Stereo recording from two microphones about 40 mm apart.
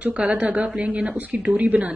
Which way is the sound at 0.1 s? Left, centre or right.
Right.